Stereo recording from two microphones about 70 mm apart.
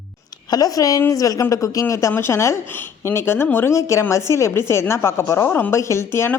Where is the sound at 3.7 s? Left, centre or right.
Left.